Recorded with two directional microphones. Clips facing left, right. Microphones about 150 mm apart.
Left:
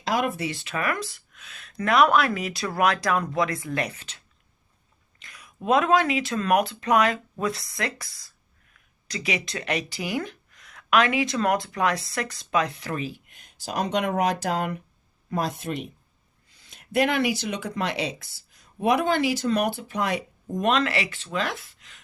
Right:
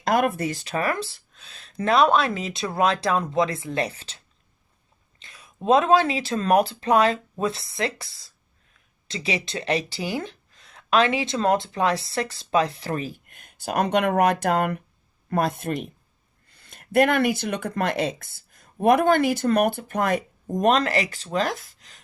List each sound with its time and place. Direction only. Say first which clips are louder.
0.0 s speech: right 4 dB; 55° right (ahead or behind); by 4.2 s 30° right (ahead or behind)
5.2 s a sound: even; 25° right (ahead or behind)
5.5 s speech: right 3 dB; 25° right (ahead or behind)